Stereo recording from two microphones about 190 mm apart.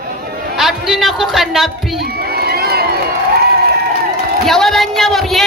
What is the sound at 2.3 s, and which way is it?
Crowd, 55° right (ahead or behind).